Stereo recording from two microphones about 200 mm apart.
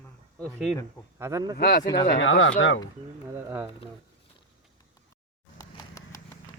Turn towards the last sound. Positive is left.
turn(degrees=15)  # may be behind; listen again after turning